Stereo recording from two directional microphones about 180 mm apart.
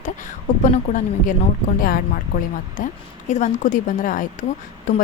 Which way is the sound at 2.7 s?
45° left (ahead or behind).